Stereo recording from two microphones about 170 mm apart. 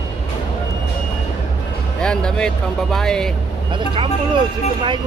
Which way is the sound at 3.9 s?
30° right (ahead or behind).